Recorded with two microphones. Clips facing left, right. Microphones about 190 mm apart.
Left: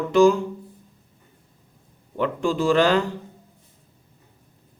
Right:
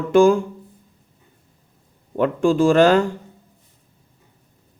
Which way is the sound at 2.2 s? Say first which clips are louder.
Right 6 dB; 50° right (ahead or behind).